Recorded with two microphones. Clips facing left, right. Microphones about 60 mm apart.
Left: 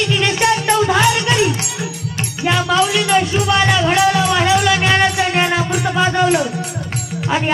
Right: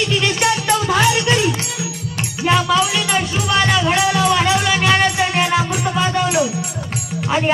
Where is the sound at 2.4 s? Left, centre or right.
Centre.